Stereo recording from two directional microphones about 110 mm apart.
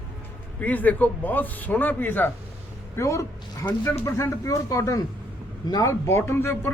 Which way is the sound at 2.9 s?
25° left (ahead or behind).